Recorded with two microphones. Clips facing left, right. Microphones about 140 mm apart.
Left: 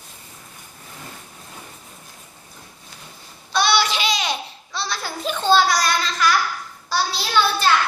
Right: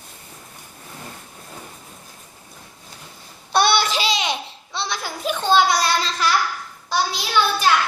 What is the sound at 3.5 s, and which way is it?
Child singing, 55° right (ahead or behind).